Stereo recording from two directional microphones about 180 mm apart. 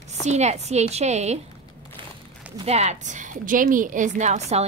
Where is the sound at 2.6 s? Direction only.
40° right (ahead or behind).